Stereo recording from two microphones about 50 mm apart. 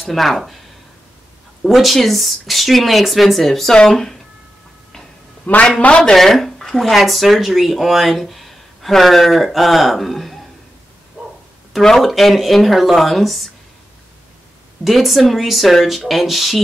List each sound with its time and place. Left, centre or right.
0.0 s speech: centre
1.6 s speech: centre
5.5 s speech: left
6.1 s speech: centre
11.2 s bow-wow: centre
11.8 s speech: centre
14.9 s speech: centre